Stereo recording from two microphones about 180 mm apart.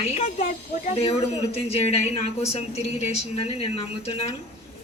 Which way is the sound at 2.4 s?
35° left (ahead or behind).